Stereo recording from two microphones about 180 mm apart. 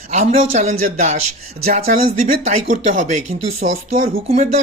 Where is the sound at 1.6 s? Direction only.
55° right (ahead or behind).